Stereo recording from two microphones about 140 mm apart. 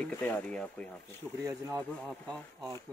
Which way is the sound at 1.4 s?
25° right (ahead or behind).